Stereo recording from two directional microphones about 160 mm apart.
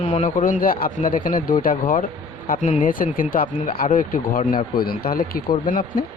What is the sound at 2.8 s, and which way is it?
Speech, 60° left (ahead or behind).